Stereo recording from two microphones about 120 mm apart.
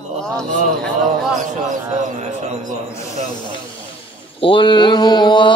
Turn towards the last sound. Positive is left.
turn(degrees=40)  # may be behind; listen again after turning